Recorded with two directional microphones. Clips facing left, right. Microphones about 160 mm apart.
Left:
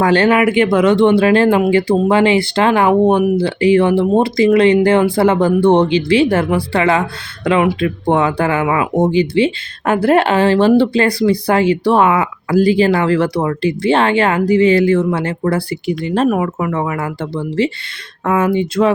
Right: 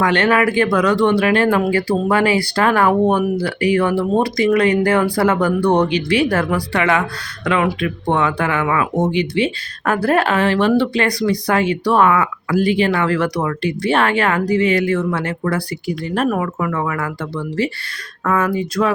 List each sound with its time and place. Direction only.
0.0 s speech: 30° left (ahead or behind)